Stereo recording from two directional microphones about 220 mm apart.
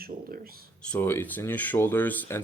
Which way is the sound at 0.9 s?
10° left (ahead or behind).